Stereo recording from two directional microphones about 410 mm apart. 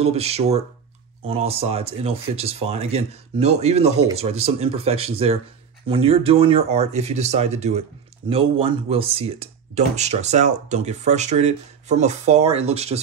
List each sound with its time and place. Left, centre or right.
0.0 s speech: centre